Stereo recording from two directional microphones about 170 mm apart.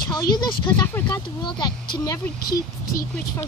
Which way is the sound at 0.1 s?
25° left (ahead or behind).